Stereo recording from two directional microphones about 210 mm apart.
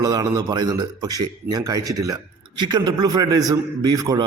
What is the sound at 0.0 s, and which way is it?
A man's voice, 20° right (ahead or behind).